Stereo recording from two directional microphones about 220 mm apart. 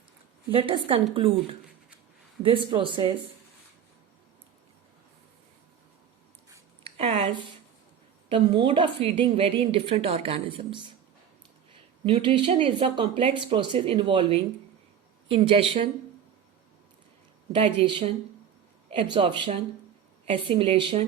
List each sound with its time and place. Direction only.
0.5 s a woman's voice: 25° right (ahead or behind)
6.5 s a sound: 25° right (ahead or behind)
8.3 s a woman's voice: 20° right (ahead or behind)
11.7 s a sound: 25° right (ahead or behind)
12.6 s a woman's voice: 25° right (ahead or behind)
17.5 s a woman's voice: 25° right (ahead or behind)